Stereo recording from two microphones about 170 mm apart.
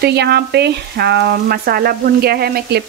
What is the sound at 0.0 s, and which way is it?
Speech, 75° right (ahead or behind).